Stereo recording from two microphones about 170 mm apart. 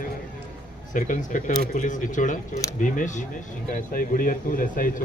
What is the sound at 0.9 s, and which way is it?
A man's voice, 50° left (ahead or behind).